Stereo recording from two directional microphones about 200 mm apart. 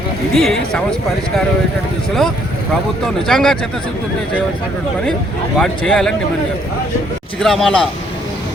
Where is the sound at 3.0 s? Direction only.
Centre (ahead or behind).